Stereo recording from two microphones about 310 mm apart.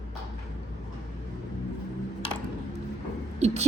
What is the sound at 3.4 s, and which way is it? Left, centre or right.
Owl, right.